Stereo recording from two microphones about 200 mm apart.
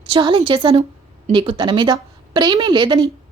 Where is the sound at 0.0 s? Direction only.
25° right (ahead or behind).